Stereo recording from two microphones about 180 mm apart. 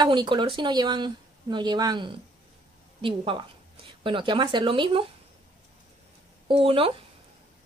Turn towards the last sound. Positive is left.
turn(degrees=-30)  # may be behind; listen again after turning